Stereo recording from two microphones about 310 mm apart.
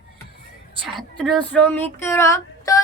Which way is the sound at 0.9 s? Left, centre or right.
Centre.